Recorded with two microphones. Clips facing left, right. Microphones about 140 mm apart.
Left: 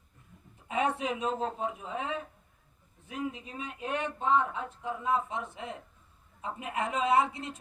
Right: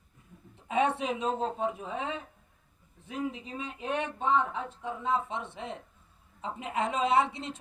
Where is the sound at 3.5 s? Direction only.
25° right (ahead or behind).